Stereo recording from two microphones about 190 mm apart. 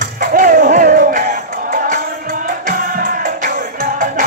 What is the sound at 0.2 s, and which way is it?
Music, 45° right (ahead or behind).